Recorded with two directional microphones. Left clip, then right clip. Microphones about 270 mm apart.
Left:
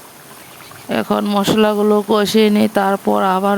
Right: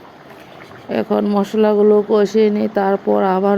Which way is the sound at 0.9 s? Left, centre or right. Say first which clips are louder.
Even; left.